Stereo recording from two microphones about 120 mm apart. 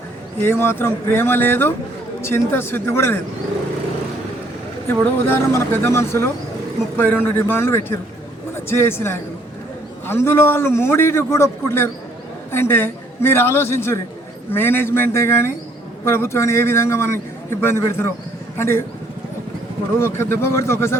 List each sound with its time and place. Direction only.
0.4 s a man's voice: 20° left (ahead or behind)
4.9 s a man's voice: 20° left (ahead or behind)
20.0 s a man's voice: 20° left (ahead or behind)